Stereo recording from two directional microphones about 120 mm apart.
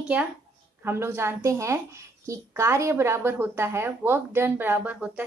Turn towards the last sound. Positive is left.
turn(degrees=-10)  # may be behind; listen again after turning